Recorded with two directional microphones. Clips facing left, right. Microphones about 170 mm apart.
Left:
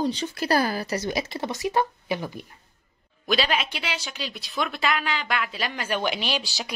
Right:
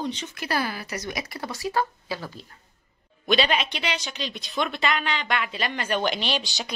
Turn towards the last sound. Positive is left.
turn(degrees=5)  # may be behind; listen again after turning